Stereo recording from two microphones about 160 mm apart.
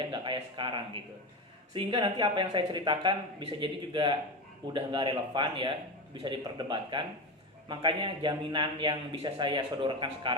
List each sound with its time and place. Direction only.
0.0 s a man's voice: 30° right (ahead or behind)
1.7 s a man's voice: 30° right (ahead or behind)